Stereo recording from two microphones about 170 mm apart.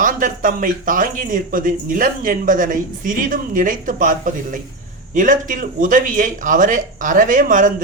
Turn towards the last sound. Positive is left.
turn(degrees=-50)  # may be behind; listen again after turning